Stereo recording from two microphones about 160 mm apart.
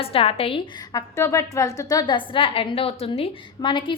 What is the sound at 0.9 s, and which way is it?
A woman's voice, 20° left (ahead or behind).